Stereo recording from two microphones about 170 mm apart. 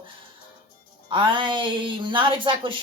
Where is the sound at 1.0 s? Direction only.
30° right (ahead or behind).